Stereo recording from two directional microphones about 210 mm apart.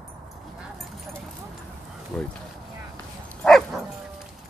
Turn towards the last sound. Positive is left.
turn(degrees=0)  # may be behind; listen again after turning